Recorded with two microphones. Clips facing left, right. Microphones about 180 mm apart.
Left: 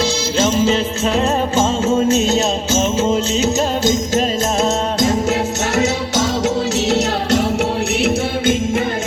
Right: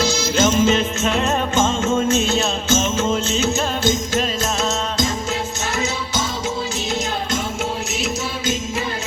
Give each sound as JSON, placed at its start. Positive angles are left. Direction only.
{"t": 0.0, "sound": "music", "side_deg": 30}
{"t": 4.6, "sound": "music", "side_deg": 60}
{"t": 5.7, "sound": "music", "side_deg": 70}
{"t": 8.0, "sound": "music", "side_deg": 55}